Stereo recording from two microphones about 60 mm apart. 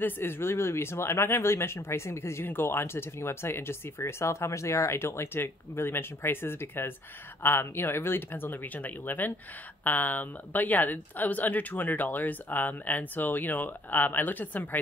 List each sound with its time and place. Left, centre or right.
0.0 s speech: left